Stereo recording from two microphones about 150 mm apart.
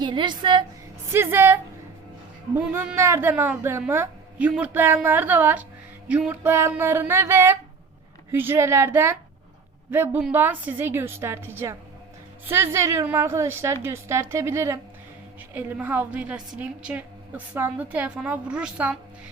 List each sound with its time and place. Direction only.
0.0 s a woman's voice: 30° right (ahead or behind)
1.1 s a woman's voice: 15° right (ahead or behind)
2.6 s a woman's voice: 10° right (ahead or behind)